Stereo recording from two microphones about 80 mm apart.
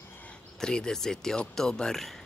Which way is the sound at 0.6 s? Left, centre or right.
Centre.